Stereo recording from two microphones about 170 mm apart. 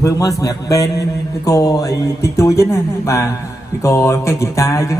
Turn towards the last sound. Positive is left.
turn(degrees=20)  # may be behind; listen again after turning